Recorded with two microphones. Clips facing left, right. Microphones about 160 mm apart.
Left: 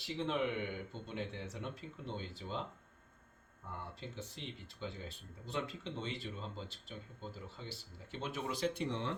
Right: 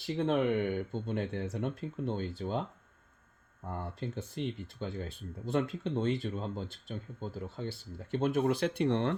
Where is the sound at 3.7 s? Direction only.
50° right (ahead or behind).